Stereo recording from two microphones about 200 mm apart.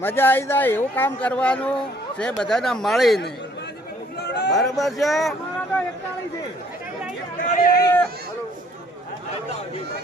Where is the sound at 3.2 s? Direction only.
60° left (ahead or behind).